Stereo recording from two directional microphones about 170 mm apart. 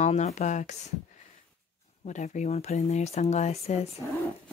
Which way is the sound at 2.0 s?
45° left (ahead or behind).